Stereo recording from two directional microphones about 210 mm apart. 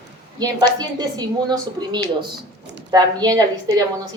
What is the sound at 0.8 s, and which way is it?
A woman's voice, 20° right (ahead or behind).